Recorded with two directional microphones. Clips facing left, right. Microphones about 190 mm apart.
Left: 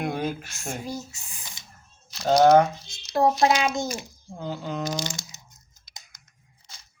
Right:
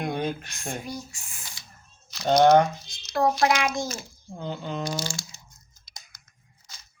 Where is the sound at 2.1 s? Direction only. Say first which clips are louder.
Left 1 dB; 5° left (ahead or behind).